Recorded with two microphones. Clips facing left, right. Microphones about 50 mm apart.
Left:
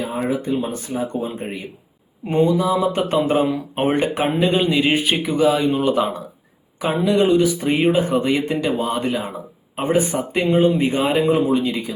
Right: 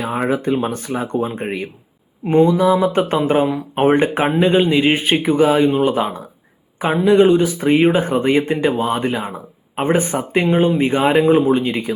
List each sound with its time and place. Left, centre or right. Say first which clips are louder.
0.0 s speech: right 3 dB; right
2.6 s speech: right 4 dB; right
5.7 s speech: right 2 dB; centre
9.7 s speech: right 2 dB; right